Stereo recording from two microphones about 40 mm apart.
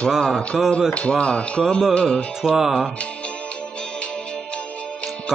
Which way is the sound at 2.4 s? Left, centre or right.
Centre.